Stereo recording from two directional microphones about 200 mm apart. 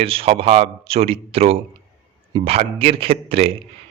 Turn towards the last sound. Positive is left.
turn(degrees=-30)  # may be behind; listen again after turning